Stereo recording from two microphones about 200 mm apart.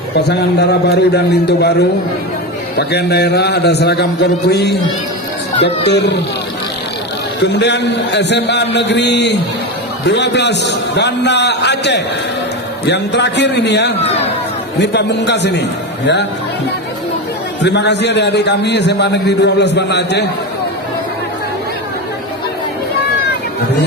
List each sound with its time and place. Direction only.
0.3 s a man's voice: 55° left (ahead or behind)
7.4 s a man's voice: 60° left (ahead or behind)
14.0 s a sound: 30° left (ahead or behind)
14.8 s a man's voice: 60° left (ahead or behind)
17.6 s a man's voice: 60° left (ahead or behind)